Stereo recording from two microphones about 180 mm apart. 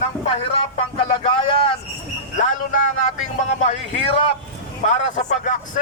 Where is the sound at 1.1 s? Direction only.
30° left (ahead or behind).